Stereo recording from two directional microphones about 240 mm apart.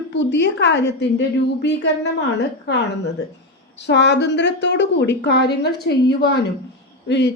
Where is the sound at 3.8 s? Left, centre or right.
Left.